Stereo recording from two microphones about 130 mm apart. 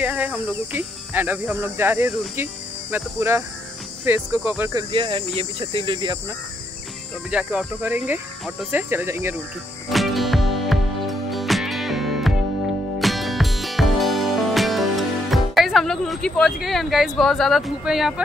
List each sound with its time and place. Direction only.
0.0 s speech: 10° right (ahead or behind)
4.9 s speech: 40° right (ahead or behind)
7.2 s speech: 10° right (ahead or behind)
9.8 s music: centre (ahead or behind)